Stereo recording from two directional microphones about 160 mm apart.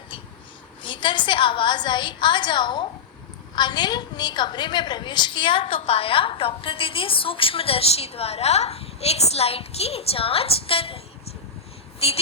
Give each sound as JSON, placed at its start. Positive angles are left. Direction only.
{"t": 0.8, "sound": "a woman's voice", "side_deg": 30}
{"t": 11.9, "sound": "vehicle", "side_deg": 40}